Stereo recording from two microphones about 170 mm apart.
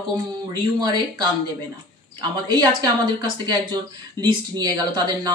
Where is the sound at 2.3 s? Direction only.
25° right (ahead or behind).